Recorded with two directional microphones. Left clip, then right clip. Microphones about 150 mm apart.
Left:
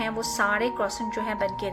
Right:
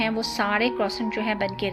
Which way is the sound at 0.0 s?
20° right (ahead or behind).